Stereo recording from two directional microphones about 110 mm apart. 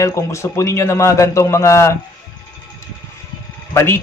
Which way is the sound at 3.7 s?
25° left (ahead or behind).